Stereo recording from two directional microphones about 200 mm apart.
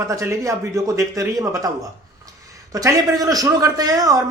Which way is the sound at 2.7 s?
15° right (ahead or behind).